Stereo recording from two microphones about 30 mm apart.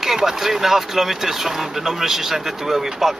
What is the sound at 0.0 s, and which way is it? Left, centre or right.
Speech, centre.